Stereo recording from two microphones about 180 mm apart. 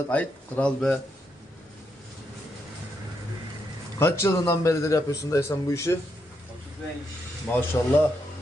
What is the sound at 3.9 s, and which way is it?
A man's voice, 15° left (ahead or behind).